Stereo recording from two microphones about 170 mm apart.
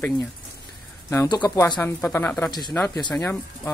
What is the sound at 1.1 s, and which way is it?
Speech, 15° left (ahead or behind).